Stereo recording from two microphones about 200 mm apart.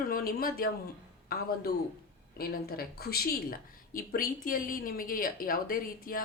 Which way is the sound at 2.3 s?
50° left (ahead or behind).